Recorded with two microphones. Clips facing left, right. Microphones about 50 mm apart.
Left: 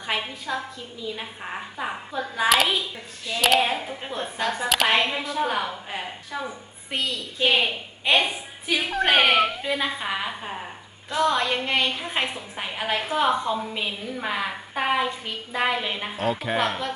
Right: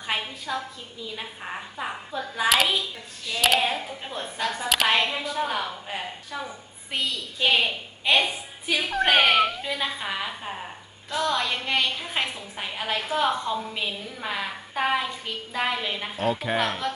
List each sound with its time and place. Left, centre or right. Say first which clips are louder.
0.2 s a woman's voice: left 1 dB; centre
3.8 s a woman's voice: left 2 dB; centre
8.6 s a woman's voice: left 1 dB; centre
16.1 s a woman's voice: even; centre